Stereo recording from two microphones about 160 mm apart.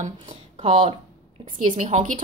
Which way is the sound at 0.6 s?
40° right (ahead or behind).